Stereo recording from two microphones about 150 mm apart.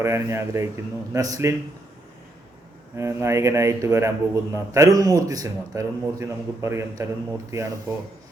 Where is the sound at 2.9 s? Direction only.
20° right (ahead or behind).